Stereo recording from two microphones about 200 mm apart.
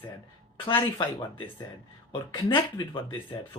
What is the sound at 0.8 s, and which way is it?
Speech, 20° left (ahead or behind).